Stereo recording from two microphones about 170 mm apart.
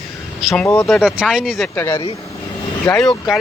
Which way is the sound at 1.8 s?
15° left (ahead or behind).